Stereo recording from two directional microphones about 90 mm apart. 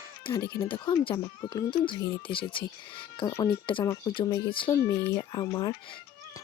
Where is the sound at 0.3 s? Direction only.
35° left (ahead or behind).